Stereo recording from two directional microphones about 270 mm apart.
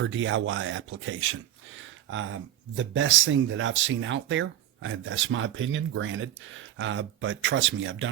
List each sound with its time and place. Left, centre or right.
0.0 s speech: right